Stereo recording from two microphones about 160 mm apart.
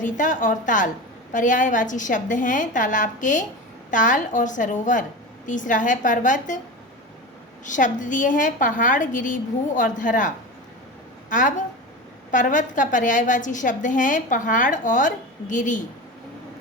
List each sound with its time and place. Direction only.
0.0 s a woman's voice: 55° left (ahead or behind)
7.6 s a woman's voice: 50° left (ahead or behind)